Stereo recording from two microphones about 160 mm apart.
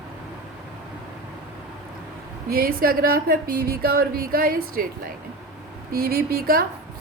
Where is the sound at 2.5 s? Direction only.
65° right (ahead or behind).